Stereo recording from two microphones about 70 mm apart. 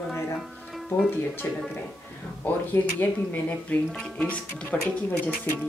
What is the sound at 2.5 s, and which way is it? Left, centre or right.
Speech, left.